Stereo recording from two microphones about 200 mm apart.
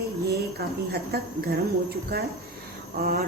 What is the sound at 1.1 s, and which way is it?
A woman's voice, 50° right (ahead or behind).